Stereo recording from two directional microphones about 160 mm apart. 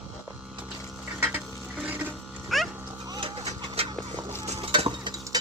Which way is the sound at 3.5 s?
35° right (ahead or behind).